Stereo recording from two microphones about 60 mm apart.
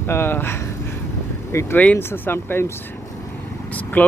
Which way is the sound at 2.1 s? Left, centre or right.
Left.